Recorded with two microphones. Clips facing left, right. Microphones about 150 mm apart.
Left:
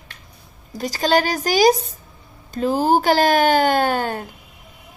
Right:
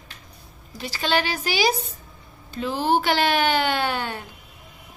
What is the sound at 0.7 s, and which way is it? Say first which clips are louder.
Speech: left 6 dB; 40° left (ahead or behind).